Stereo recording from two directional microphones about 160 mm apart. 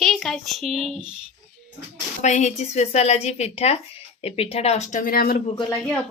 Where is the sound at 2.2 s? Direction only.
50° left (ahead or behind); by 5.4 s 65° left (ahead or behind).